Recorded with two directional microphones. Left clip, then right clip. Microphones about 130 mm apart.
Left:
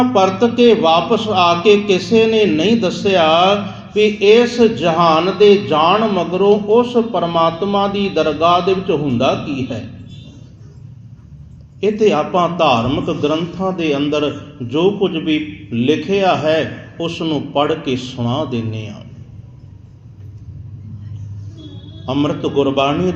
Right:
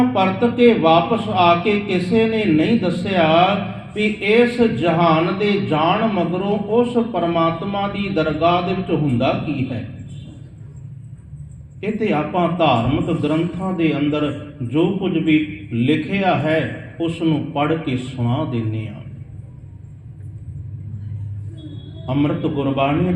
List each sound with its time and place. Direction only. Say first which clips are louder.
0.1 s a man's voice: left 5 dB; 45° left (ahead or behind)
11.8 s a man's voice: left 7 dB; 45° left (ahead or behind)
22.0 s a man's voice: left 3 dB; 45° left (ahead or behind)